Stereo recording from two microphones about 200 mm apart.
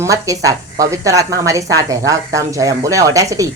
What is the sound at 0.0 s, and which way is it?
Speech, 15° right (ahead or behind).